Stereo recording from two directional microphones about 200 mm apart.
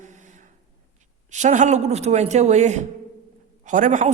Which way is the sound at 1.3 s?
35° right (ahead or behind).